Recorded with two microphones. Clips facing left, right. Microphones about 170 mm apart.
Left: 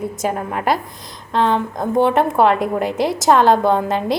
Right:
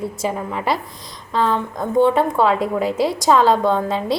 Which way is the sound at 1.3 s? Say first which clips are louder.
Left 2 dB; centre (ahead or behind).